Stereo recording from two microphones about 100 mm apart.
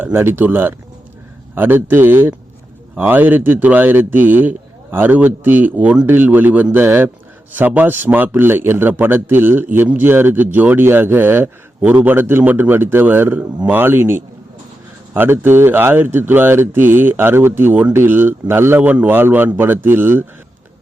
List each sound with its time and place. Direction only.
0.0 s a man's voice: 25° right (ahead or behind)